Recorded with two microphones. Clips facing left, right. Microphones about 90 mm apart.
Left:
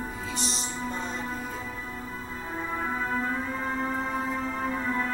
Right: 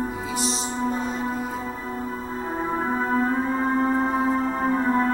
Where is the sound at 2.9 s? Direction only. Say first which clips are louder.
Right 8 dB; 40° right (ahead or behind).